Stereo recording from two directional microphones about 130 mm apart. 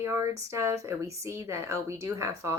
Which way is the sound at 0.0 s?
20° right (ahead or behind).